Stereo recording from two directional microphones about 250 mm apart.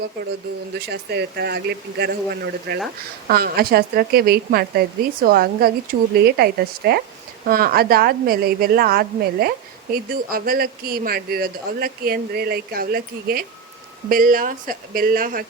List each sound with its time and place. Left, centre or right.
0.9 s speech: right